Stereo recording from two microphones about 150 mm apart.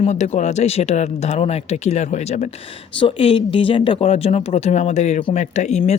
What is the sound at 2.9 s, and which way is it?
Speech, 35° left (ahead or behind).